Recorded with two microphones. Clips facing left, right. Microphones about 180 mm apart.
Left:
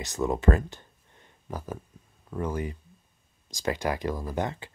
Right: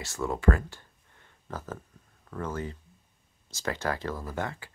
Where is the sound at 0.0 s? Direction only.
20° left (ahead or behind).